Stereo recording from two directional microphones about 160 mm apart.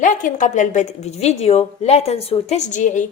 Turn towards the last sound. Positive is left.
turn(degrees=50)  # may be behind; listen again after turning